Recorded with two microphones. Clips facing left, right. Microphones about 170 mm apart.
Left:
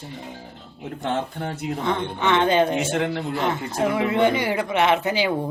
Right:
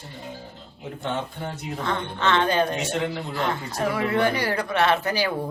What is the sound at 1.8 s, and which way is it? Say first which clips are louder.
Speech: left 2 dB; 15° left (ahead or behind).